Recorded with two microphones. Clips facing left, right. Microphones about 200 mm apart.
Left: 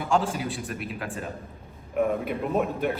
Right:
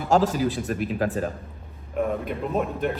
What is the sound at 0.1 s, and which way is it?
A man's voice, 40° right (ahead or behind).